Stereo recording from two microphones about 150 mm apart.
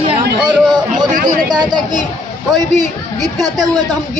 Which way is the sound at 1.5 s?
25° right (ahead or behind).